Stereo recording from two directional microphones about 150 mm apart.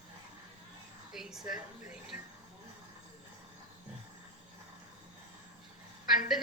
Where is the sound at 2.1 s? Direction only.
60° left (ahead or behind).